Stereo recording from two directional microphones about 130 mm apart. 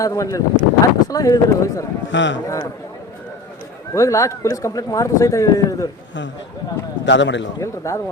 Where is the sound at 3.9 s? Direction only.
25° left (ahead or behind).